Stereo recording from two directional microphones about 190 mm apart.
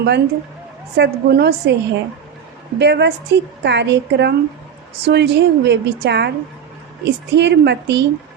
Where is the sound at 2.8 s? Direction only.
60° right (ahead or behind).